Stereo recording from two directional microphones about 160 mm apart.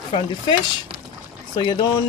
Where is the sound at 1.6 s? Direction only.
25° left (ahead or behind).